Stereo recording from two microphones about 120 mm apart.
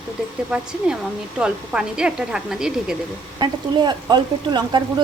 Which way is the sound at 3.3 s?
35° right (ahead or behind).